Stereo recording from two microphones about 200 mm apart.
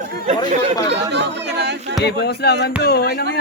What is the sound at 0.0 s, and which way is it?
Chatter, 45° right (ahead or behind).